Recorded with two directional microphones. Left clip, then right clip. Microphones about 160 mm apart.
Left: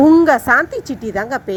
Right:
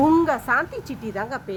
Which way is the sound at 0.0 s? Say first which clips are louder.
Left 8 dB; 10° left (ahead or behind).